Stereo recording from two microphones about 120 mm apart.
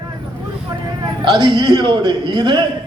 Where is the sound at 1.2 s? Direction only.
40° right (ahead or behind).